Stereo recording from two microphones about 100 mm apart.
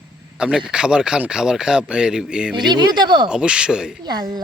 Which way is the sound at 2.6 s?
45° right (ahead or behind).